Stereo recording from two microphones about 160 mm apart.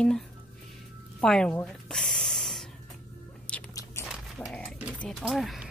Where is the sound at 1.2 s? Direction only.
5° left (ahead or behind).